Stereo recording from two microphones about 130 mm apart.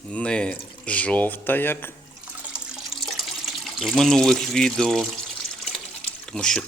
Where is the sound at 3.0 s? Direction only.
Centre (ahead or behind).